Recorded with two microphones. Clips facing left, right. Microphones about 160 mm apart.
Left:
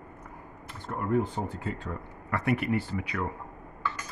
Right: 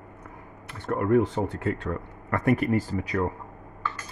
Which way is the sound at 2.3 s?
45° right (ahead or behind).